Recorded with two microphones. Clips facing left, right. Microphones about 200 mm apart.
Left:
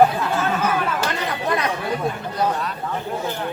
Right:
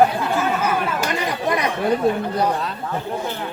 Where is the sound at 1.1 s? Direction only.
15° right (ahead or behind).